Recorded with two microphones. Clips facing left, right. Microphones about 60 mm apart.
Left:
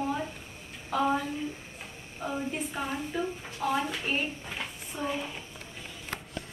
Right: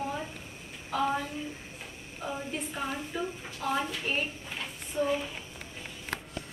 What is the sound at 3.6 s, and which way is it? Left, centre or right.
Speech, centre.